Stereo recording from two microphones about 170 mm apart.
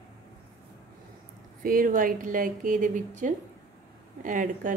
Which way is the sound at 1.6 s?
55° right (ahead or behind).